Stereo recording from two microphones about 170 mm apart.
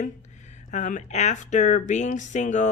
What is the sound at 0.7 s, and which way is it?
Speech, 45° left (ahead or behind).